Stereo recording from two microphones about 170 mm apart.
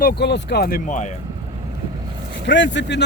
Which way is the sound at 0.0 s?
85° left.